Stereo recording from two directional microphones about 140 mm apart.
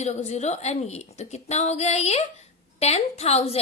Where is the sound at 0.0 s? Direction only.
55° left (ahead or behind).